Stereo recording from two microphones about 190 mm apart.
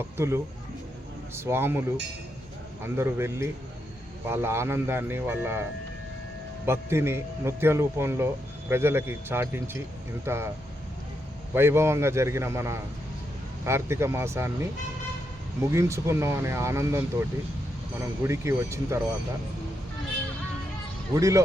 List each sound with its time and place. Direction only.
0.0 s a man's voice: 15° right (ahead or behind)
2.8 s a man's voice: 15° right (ahead or behind)
6.7 s a man's voice: 15° right (ahead or behind)
11.5 s a man's voice: 10° right (ahead or behind)
21.2 s a man's voice: 15° right (ahead or behind)